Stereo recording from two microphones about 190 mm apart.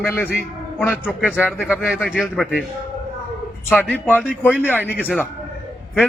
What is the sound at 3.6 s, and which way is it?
Speech, 5° left (ahead or behind).